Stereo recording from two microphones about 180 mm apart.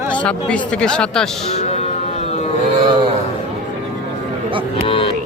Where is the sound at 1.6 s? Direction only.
35° left (ahead or behind).